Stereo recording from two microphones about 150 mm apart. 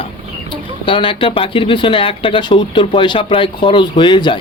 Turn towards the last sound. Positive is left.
turn(degrees=30)  # may be behind; listen again after turning